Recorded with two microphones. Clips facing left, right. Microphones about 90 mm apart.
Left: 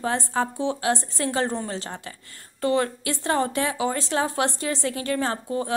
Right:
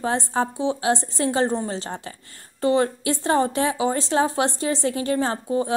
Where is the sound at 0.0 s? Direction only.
25° right (ahead or behind).